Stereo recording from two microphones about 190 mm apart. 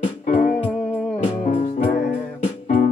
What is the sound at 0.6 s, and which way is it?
Music, 5° left (ahead or behind).